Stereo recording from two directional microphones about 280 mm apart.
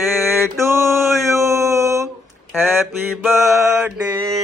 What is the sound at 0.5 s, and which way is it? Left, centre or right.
A man's voice, centre.